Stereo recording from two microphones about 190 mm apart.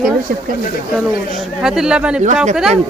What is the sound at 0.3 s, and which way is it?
Speech, 50° right (ahead or behind).